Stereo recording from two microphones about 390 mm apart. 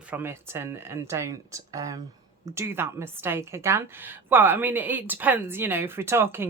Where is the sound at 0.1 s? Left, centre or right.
Centre.